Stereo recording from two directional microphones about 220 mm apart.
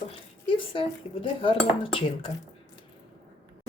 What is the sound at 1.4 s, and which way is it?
Cutlery, 25° left (ahead or behind).